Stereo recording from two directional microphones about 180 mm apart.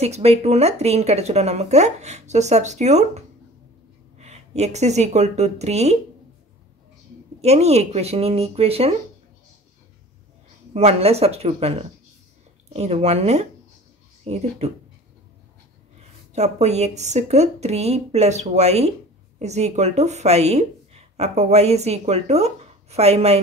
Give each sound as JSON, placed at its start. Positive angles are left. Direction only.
{"t": 0.0, "sound": "speech", "side_deg": -35}
{"t": 7.4, "sound": "speech", "side_deg": -35}
{"t": 10.7, "sound": "speech", "side_deg": -35}
{"t": 16.3, "sound": "speech", "side_deg": -40}